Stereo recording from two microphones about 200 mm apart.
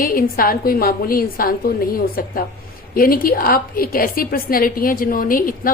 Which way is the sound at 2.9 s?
45° left (ahead or behind).